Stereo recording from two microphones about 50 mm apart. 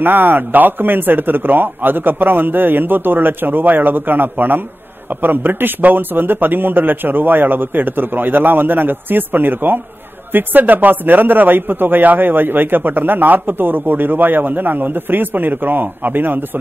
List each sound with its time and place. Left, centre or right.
0.0 s speech: right